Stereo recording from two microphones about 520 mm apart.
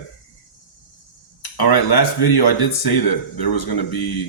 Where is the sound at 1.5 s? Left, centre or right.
Left.